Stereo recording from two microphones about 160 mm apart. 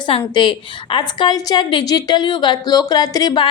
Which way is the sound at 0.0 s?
30° left (ahead or behind).